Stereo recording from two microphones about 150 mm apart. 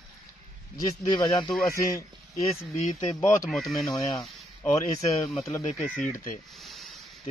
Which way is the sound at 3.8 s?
20° left (ahead or behind).